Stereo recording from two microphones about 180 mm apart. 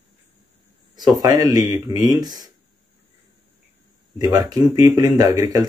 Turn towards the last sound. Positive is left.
turn(degrees=-20)  # may be behind; listen again after turning